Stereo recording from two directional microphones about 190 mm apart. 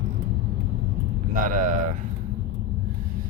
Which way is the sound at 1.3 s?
45° right (ahead or behind).